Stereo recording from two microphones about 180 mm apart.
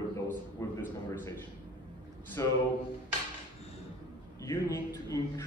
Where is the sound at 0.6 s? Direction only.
15° left (ahead or behind).